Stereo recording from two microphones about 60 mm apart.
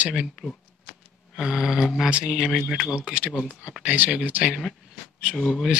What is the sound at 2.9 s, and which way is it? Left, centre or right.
Speech, centre.